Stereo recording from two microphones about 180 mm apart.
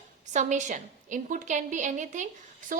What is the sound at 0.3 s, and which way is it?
A woman's voice, 40° right (ahead or behind).